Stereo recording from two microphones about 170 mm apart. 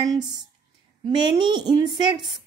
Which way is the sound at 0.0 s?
20° right (ahead or behind).